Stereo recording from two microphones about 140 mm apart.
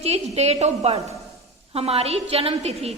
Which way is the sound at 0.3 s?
50° right (ahead or behind).